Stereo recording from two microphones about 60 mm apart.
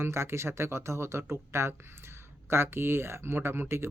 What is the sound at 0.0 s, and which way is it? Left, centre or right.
Speech, right.